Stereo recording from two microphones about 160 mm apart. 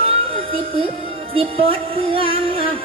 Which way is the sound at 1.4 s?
35° right (ahead or behind).